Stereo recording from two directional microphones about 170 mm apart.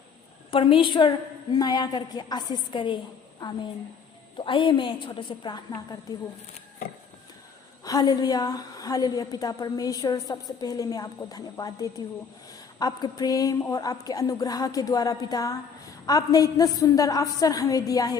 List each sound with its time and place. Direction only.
0.5 s a woman's voice: 30° left (ahead or behind)
4.4 s a woman's voice: 30° left (ahead or behind)
7.9 s a woman's voice: 20° left (ahead or behind)